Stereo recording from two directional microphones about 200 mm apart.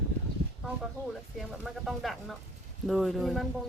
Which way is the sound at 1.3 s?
Centre (ahead or behind).